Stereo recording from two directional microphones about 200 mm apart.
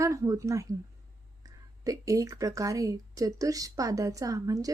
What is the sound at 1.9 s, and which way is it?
Speech, 15° right (ahead or behind).